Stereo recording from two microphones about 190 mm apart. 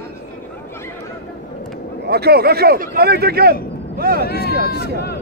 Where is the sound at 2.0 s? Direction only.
55° right (ahead or behind).